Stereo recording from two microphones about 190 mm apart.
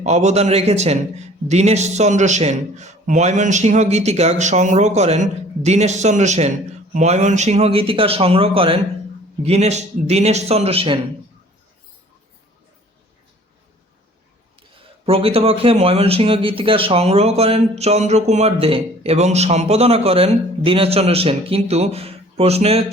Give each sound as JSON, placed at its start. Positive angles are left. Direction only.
{"t": 0.0, "sound": "a man's voice", "side_deg": -35}
{"t": 15.0, "sound": "a man's voice", "side_deg": -30}